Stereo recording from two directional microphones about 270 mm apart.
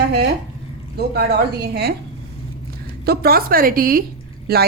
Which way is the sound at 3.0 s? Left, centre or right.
Right.